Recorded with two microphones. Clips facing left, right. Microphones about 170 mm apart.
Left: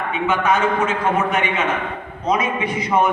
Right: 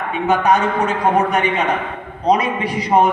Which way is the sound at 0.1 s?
35° right (ahead or behind).